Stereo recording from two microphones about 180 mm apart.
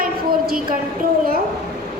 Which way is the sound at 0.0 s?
55° right (ahead or behind).